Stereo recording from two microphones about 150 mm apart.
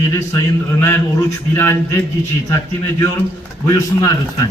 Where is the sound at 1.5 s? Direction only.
15° left (ahead or behind).